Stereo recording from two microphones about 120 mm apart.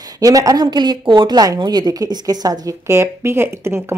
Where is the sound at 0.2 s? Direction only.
30° right (ahead or behind).